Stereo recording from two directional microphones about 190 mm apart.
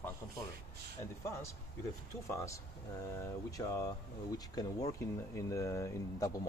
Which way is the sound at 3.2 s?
15° left (ahead or behind).